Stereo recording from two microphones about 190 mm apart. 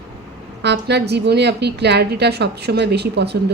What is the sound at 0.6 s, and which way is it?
A woman's voice, 60° right (ahead or behind).